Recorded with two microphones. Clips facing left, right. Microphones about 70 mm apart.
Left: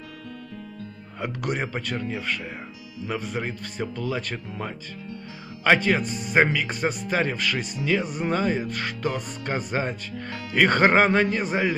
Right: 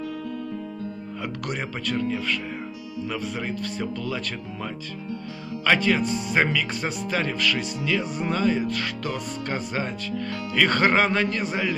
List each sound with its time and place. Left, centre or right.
1.2 s speech: centre
5.6 s speech: centre